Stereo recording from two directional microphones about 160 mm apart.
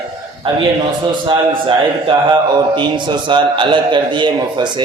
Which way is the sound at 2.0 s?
30° right (ahead or behind).